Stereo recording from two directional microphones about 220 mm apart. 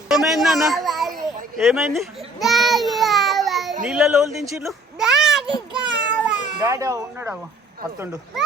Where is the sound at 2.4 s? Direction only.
Centre (ahead or behind).